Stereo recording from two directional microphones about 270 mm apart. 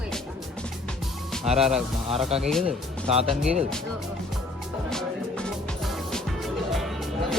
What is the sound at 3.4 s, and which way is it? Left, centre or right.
Speech, centre.